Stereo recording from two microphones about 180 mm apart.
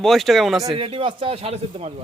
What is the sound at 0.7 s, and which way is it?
Speech, 30° right (ahead or behind).